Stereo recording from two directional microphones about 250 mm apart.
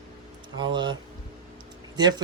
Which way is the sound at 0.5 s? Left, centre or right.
Centre.